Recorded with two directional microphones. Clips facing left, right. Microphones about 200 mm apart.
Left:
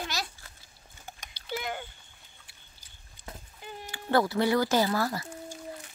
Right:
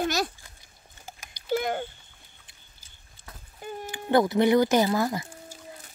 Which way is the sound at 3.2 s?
15° left (ahead or behind).